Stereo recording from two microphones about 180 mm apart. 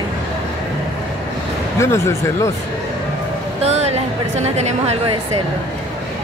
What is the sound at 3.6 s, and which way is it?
A woman's voice, 35° right (ahead or behind).